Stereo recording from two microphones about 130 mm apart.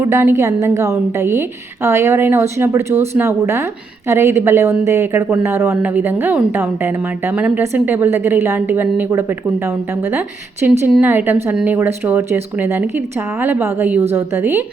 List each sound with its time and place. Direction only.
0.0 s a woman's voice: 15° right (ahead or behind)